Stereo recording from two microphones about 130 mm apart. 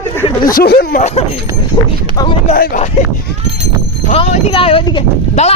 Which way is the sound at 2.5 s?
70° left (ahead or behind).